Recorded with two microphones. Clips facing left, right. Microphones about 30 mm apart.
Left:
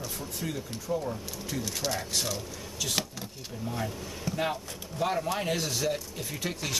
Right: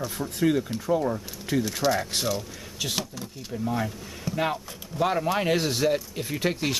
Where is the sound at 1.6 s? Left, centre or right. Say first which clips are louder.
Right 7 dB; centre.